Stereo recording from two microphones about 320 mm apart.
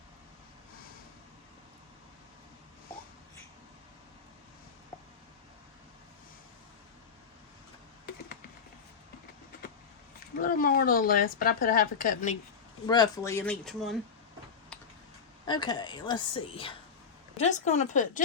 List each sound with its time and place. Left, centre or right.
10.4 s speech: left
12.8 s a woman's voice: centre
15.4 s a woman's voice: centre